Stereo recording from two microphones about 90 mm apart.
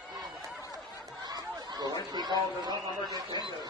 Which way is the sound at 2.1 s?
50° right (ahead or behind).